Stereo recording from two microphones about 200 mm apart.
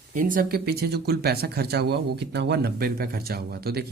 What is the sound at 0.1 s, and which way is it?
Speech, 40° right (ahead or behind).